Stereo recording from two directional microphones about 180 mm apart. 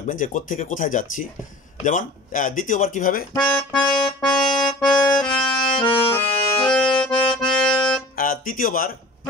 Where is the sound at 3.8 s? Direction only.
25° left (ahead or behind).